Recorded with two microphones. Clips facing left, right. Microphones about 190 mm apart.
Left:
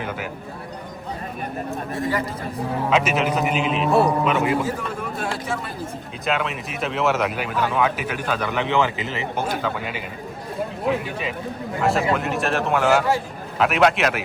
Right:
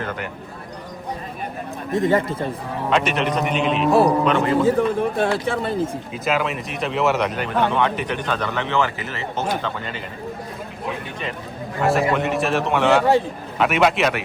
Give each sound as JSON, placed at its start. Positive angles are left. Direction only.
{"t": 1.9, "sound": "speech", "side_deg": -20}
{"t": 2.9, "sound": "speech", "side_deg": 0}
{"t": 4.6, "sound": "speech", "side_deg": -30}
{"t": 6.2, "sound": "speech", "side_deg": 0}
{"t": 11.8, "sound": "speech", "side_deg": 0}